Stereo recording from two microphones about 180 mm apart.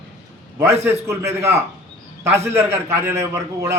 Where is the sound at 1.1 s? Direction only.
15° right (ahead or behind).